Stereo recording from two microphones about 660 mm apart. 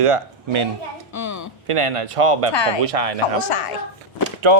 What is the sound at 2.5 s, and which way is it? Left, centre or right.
Speech, left.